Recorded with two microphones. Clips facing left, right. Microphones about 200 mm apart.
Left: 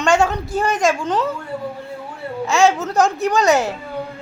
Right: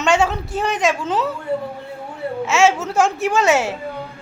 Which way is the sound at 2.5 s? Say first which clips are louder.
Left 1 dB; centre (ahead or behind).